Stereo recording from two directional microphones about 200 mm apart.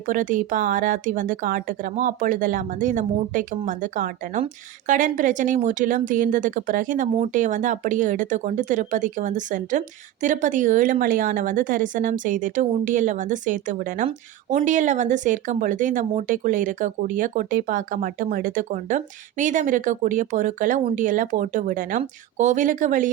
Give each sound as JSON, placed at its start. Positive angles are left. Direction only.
{"t": 0.0, "sound": "speech", "side_deg": -40}